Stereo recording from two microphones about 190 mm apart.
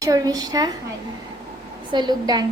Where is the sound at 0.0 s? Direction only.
20° right (ahead or behind).